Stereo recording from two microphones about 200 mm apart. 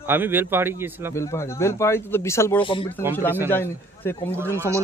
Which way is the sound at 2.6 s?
25° left (ahead or behind).